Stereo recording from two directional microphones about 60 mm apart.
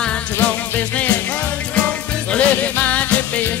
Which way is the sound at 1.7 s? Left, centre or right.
Left.